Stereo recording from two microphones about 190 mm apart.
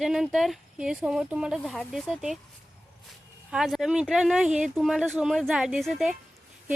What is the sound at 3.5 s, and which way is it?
Speech, centre (ahead or behind).